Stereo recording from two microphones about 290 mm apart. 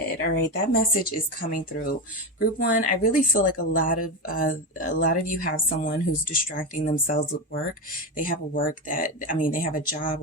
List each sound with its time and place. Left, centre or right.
0.0 s speech: left